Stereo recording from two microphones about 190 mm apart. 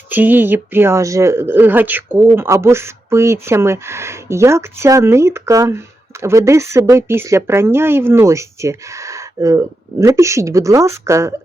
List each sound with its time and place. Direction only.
0.1 s speech: 10° right (ahead or behind)